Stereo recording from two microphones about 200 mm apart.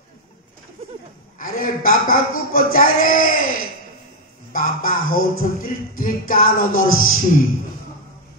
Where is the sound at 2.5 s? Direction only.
45° left (ahead or behind).